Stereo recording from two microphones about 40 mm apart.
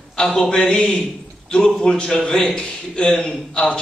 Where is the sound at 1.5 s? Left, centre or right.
Centre.